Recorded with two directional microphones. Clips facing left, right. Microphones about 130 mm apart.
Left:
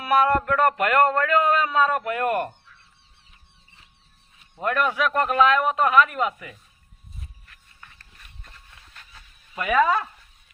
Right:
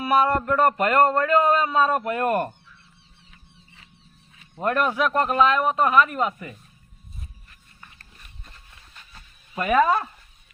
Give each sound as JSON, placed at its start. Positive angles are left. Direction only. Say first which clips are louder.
{"t": 0.0, "sound": "speech", "louder": "even", "side_deg": -25}
{"t": 4.6, "sound": "speech", "louder": "right 1 dB", "side_deg": -35}
{"t": 8.4, "sound": "a sound", "louder": "even", "side_deg": -10}
{"t": 9.6, "sound": "speech", "louder": "right 1 dB", "side_deg": -30}